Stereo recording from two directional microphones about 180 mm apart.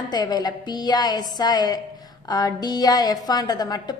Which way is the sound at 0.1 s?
20° left (ahead or behind).